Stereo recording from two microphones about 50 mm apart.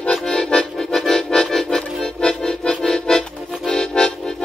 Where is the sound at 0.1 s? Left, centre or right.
Centre.